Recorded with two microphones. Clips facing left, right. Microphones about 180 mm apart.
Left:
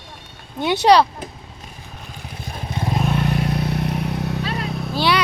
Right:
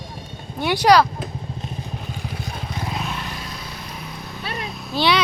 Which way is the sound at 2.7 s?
25° left (ahead or behind).